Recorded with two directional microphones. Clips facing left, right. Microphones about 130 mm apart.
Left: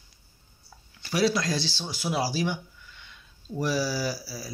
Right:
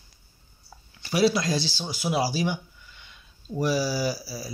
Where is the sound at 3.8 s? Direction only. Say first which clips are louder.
Right 2 dB; 5° right (ahead or behind).